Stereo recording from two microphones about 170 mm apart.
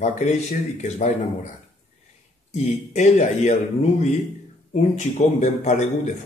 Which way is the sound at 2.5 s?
45° left (ahead or behind).